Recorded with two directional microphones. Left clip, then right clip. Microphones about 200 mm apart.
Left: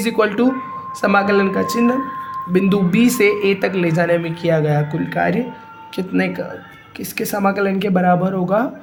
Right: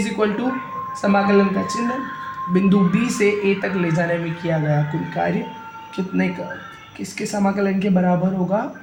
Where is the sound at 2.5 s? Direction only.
45° left (ahead or behind).